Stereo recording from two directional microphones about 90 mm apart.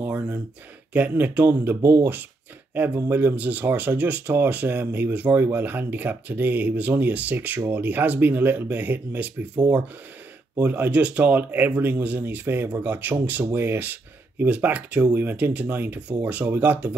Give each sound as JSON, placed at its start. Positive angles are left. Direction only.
{"t": 0.0, "sound": "a sound", "side_deg": -20}
{"t": 0.9, "sound": "speech", "side_deg": -15}
{"t": 10.6, "sound": "speech", "side_deg": -20}